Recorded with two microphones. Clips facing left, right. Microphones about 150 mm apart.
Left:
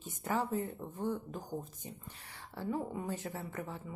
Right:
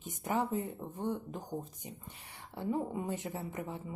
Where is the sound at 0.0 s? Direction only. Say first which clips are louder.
Right 1 dB; 15° right (ahead or behind).